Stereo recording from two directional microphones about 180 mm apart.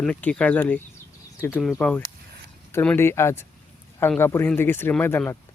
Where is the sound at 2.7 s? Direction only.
10° left (ahead or behind).